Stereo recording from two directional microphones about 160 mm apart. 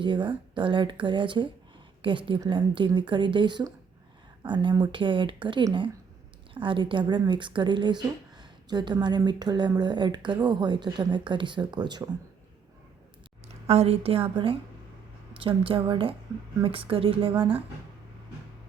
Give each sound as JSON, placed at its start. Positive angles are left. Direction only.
{"t": 0.0, "sound": "a woman's voice", "side_deg": -30}
{"t": 13.7, "sound": "a woman's voice", "side_deg": -40}